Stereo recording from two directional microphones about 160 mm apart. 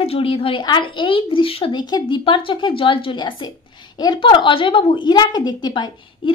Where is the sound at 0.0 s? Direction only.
35° left (ahead or behind).